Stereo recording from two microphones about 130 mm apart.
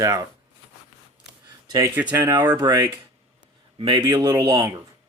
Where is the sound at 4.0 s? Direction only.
25° right (ahead or behind).